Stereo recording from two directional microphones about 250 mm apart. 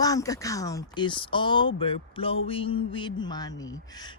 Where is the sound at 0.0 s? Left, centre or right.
Centre.